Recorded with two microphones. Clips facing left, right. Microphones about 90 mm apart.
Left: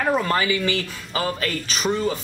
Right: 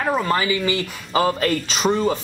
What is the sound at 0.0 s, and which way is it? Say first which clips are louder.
Speech: right 1 dB; 5° right (ahead or behind).